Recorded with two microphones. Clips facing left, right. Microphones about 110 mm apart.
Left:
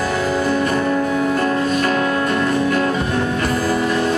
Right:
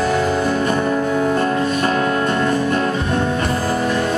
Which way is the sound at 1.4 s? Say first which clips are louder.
Even; 30° right (ahead or behind).